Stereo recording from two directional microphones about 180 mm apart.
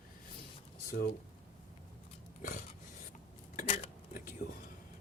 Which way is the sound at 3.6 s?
35° left (ahead or behind).